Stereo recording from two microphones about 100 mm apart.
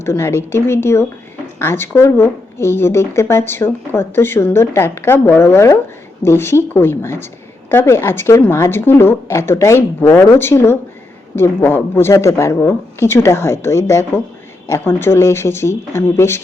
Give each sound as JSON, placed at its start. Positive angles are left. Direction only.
{"t": 0.0, "sound": "speech", "side_deg": 25}